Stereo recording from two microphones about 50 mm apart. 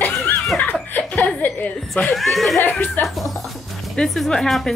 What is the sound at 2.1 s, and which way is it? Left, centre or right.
Speech, centre.